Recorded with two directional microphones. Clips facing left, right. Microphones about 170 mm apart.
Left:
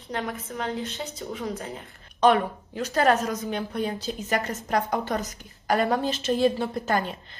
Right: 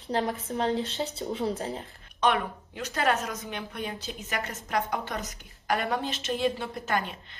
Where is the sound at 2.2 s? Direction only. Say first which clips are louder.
Left 6 dB; 35° left (ahead or behind).